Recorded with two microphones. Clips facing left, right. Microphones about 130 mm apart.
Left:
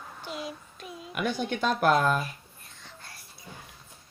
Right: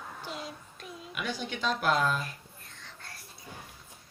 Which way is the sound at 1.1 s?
50° left (ahead or behind).